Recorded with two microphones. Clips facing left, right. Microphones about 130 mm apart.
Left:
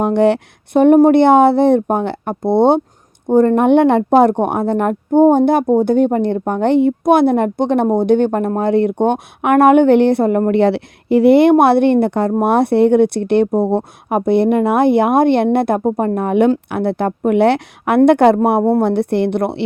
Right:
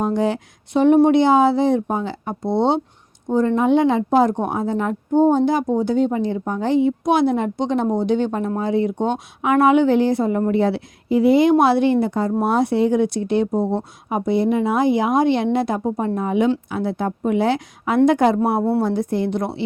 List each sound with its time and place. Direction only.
0.0 s speech: 65° left (ahead or behind)